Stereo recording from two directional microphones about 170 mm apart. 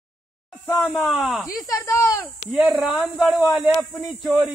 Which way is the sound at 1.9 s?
15° left (ahead or behind).